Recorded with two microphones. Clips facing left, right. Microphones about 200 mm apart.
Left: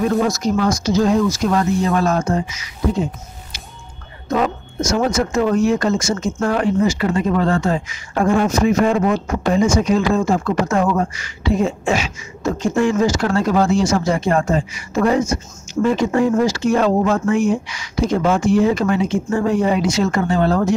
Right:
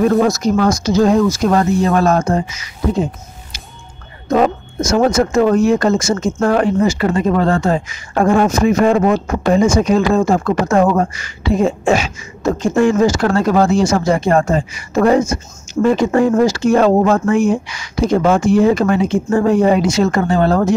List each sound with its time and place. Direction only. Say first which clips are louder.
0.0 s speech: right 4 dB; 50° right (ahead or behind)
4.9 s speech: right 5 dB; 50° right (ahead or behind)